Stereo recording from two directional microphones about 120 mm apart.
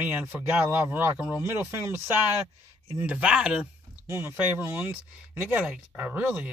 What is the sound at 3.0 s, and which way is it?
Speech, 10° right (ahead or behind).